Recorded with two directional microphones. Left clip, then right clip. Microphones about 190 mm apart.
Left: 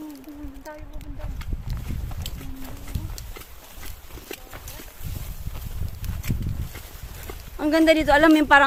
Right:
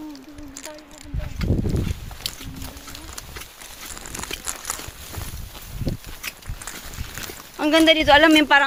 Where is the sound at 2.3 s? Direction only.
20° right (ahead or behind).